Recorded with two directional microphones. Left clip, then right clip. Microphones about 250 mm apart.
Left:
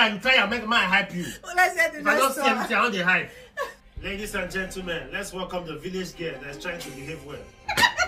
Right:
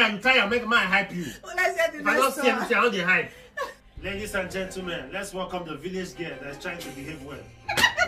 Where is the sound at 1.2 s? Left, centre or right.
Left.